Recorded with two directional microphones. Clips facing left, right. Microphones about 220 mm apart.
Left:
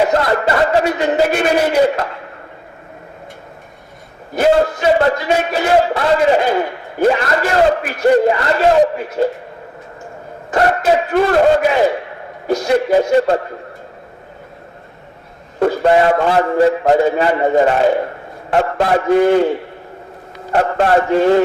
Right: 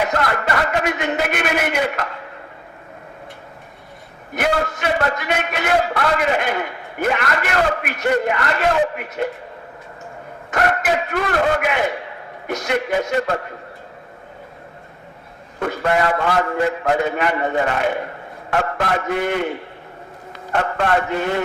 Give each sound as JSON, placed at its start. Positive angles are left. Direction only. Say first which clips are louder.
{"t": 0.0, "sound": "a sound", "louder": "left 6 dB", "side_deg": 30}
{"t": 4.4, "sound": "a man's voice", "louder": "left 8 dB", "side_deg": 30}
{"t": 10.5, "sound": "a man's voice", "louder": "left 6 dB", "side_deg": 30}
{"t": 15.6, "sound": "a man's voice", "louder": "left 7 dB", "side_deg": 30}
{"t": 20.5, "sound": "a man's voice", "louder": "left 6 dB", "side_deg": 35}